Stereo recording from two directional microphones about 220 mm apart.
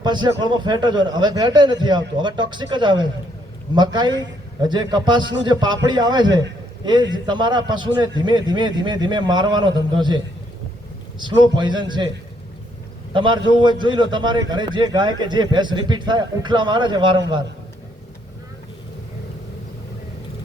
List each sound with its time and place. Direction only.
0.0 s a man's voice: 20° right (ahead or behind)
11.2 s a man's voice: 20° right (ahead or behind)
13.1 s a man's voice: 20° right (ahead or behind)